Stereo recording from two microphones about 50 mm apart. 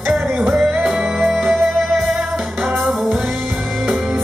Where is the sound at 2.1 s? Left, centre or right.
Centre.